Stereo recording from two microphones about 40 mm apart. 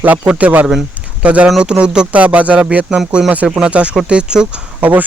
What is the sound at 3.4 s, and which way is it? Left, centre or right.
Speech, centre.